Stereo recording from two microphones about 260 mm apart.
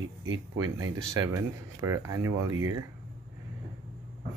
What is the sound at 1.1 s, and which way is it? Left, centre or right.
Speech, centre.